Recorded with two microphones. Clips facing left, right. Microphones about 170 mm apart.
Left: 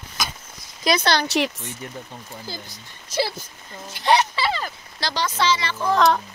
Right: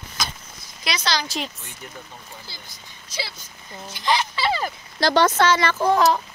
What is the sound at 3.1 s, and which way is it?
Speech, 55° left (ahead or behind).